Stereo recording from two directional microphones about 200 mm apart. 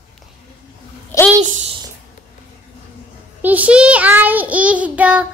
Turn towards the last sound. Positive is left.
turn(degrees=-5)  # may be behind; listen again after turning